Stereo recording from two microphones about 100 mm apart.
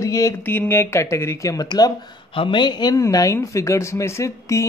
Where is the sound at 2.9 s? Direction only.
35° left (ahead or behind).